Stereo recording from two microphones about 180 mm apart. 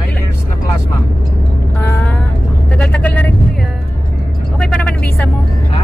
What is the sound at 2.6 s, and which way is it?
Music, 5° left (ahead or behind).